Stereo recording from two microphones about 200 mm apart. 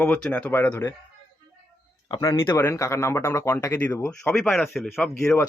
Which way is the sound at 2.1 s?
20° left (ahead or behind).